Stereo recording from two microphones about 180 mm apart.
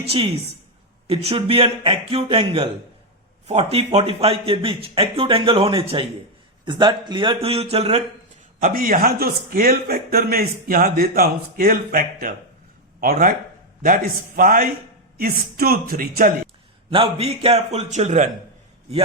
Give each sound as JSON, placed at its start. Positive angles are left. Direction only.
{"t": 1.0, "sound": "speech", "side_deg": -35}
{"t": 8.6, "sound": "a man's voice", "side_deg": -50}
{"t": 16.9, "sound": "speech", "side_deg": -30}